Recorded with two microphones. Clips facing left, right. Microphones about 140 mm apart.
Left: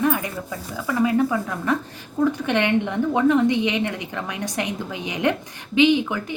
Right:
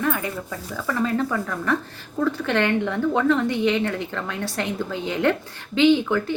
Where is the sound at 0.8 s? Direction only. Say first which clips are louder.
Left 3 dB; 10° left (ahead or behind).